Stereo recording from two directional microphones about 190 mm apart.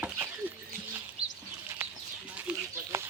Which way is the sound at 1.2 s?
30° right (ahead or behind).